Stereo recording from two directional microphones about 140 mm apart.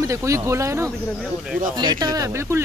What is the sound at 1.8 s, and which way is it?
Speech, 30° right (ahead or behind).